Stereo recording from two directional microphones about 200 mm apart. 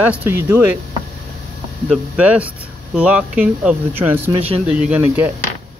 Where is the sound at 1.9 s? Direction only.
5° right (ahead or behind).